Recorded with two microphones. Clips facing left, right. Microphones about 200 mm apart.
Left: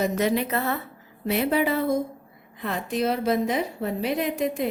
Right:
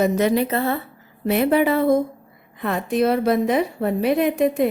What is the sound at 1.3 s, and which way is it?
A woman's voice, 55° right (ahead or behind).